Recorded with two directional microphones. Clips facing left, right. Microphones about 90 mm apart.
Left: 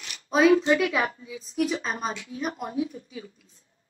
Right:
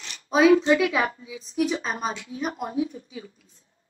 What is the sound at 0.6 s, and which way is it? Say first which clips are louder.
Speech: right 2 dB; 25° right (ahead or behind).